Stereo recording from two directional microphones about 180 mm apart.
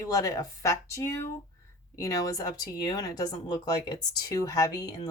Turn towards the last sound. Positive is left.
turn(degrees=20)  # may be behind; listen again after turning